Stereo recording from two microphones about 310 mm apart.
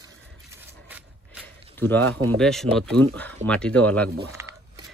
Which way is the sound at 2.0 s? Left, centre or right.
Right.